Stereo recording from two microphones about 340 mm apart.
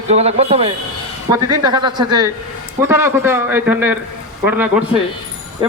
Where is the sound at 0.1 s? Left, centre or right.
Centre.